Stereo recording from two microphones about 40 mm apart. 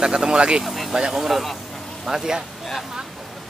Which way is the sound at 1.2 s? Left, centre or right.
Centre.